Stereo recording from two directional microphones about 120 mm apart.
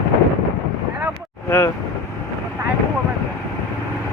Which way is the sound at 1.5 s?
20° left (ahead or behind).